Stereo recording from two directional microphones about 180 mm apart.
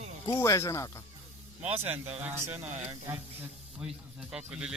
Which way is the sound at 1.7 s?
10° right (ahead or behind).